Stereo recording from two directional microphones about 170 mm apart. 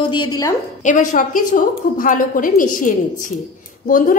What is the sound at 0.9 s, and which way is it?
A woman's voice, 50° left (ahead or behind).